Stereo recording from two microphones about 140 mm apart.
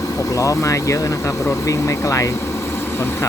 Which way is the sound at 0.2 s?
25° left (ahead or behind).